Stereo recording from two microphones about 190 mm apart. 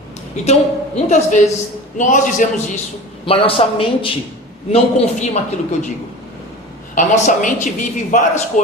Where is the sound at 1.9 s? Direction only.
40° left (ahead or behind).